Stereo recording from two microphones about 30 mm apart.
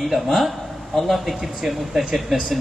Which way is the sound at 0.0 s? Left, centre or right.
Centre.